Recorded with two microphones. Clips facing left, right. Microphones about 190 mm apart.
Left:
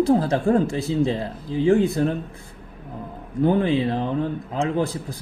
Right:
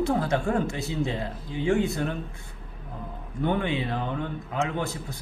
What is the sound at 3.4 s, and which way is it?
Speech, 35° left (ahead or behind).